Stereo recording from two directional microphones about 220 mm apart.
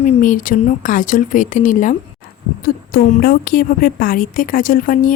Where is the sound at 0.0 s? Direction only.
35° left (ahead or behind).